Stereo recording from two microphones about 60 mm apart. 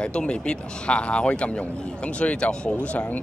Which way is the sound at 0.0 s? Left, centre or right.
Centre.